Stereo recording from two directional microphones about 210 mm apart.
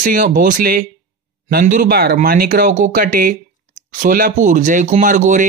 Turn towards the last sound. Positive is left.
turn(degrees=-35)  # may be behind; listen again after turning